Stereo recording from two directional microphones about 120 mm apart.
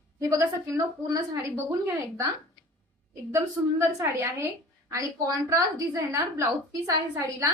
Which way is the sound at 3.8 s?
25° right (ahead or behind).